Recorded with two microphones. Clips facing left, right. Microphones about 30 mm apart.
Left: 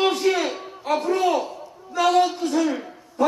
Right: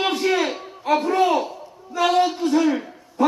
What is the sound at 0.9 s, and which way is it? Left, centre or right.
A child's voice, centre.